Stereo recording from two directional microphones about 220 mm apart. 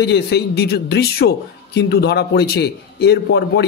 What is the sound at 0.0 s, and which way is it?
Speech, 50° left (ahead or behind).